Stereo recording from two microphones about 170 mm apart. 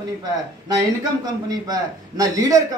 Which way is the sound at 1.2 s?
20° right (ahead or behind).